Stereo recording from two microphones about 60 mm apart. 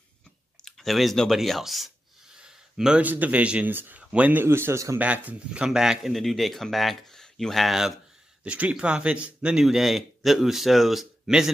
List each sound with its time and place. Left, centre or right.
0.7 s speech: centre
2.3 s a sound: centre
3.0 s a man's voice: right
3.7 s speech: right
4.0 s a sound: centre
4.3 s speech: right
4.9 s a man's voice: right
5.6 s a man's voice: centre
6.1 s speech: centre
8.5 s a man's voice: right